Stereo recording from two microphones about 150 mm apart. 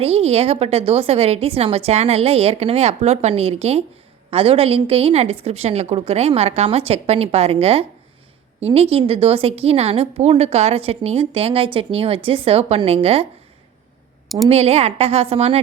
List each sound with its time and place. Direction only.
0.0 s a woman's voice: 40° right (ahead or behind)
14.5 s a woman's voice: 45° right (ahead or behind)